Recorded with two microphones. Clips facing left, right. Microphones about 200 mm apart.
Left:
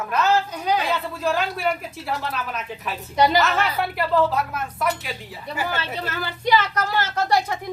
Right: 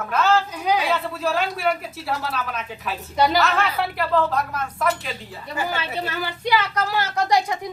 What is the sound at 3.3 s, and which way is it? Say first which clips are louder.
Speech: even; centre (ahead or behind).